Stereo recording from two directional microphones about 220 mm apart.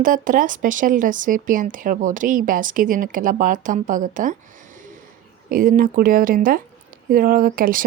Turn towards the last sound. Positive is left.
turn(degrees=-40)  # may be behind; listen again after turning